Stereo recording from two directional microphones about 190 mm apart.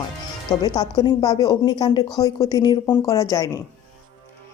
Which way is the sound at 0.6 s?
20° left (ahead or behind).